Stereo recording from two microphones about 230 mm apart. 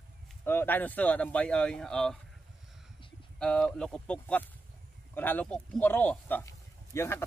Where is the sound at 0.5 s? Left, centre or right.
Centre.